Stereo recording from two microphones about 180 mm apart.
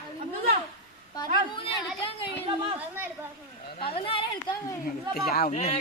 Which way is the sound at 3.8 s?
30° left (ahead or behind).